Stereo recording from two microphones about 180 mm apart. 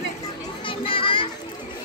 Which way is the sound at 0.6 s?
30° left (ahead or behind).